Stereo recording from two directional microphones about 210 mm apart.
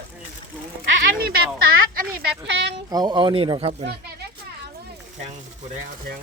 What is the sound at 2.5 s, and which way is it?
Speech, 60° right (ahead or behind).